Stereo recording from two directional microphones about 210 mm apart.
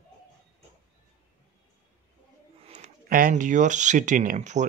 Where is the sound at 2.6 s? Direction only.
35° right (ahead or behind).